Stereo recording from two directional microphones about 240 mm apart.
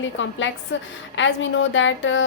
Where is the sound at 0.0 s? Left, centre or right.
Left.